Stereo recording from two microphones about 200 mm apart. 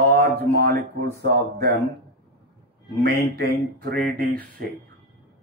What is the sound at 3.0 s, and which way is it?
Speech, 50° right (ahead or behind).